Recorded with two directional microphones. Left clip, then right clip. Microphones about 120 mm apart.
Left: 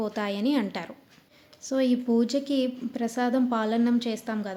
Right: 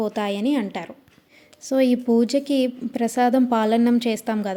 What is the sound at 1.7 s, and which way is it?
Speech, 45° right (ahead or behind).